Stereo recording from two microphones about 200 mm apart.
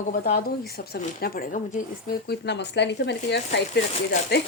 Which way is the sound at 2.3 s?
60° left (ahead or behind).